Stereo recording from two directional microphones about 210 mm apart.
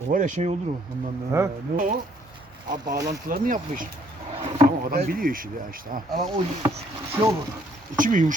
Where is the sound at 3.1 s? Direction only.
40° right (ahead or behind).